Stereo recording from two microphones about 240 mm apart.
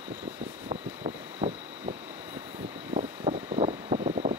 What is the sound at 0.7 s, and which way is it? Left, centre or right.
Vehicle, right.